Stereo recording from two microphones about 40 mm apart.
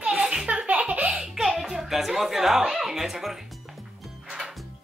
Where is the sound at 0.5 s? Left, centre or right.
Right.